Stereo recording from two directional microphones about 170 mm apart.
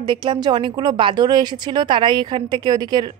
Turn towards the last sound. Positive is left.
turn(degrees=-25)  # may be behind; listen again after turning